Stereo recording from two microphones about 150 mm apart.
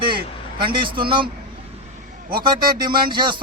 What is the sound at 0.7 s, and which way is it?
Speech, 35° right (ahead or behind).